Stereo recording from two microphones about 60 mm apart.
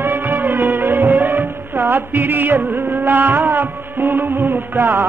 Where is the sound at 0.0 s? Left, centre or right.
Right.